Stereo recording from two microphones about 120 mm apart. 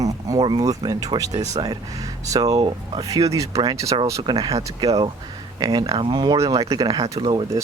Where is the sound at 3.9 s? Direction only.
40° right (ahead or behind).